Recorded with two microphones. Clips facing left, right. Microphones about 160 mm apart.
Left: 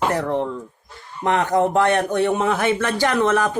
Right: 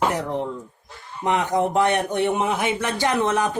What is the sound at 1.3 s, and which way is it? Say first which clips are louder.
Speech: left 3 dB; 15° right (ahead or behind).